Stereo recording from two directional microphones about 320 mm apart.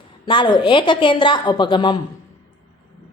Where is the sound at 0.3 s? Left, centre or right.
Centre.